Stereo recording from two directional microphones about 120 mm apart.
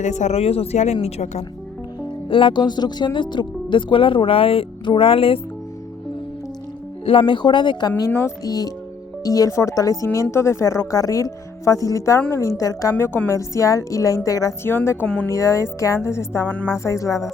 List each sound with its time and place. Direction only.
0.0 s a woman's voice: 75° left (ahead or behind)
2.3 s speech: 45° left (ahead or behind)
7.0 s speech: 45° left (ahead or behind); by 14.9 s 20° left (ahead or behind)
15.0 s speech: 10° left (ahead or behind)
15.3 s speech: 25° left (ahead or behind)